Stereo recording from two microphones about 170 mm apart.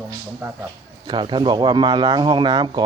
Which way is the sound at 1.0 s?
30° right (ahead or behind).